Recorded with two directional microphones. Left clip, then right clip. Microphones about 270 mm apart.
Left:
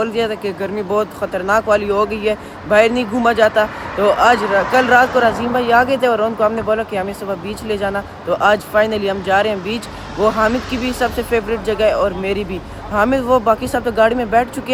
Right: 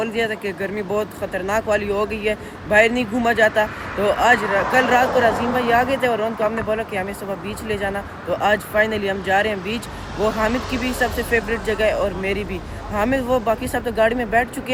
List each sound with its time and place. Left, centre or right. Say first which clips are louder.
0.0 s speech: left 4 dB; centre
10.8 s speech: left 3 dB; centre